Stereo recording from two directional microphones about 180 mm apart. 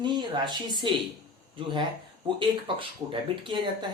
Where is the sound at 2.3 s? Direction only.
30° right (ahead or behind).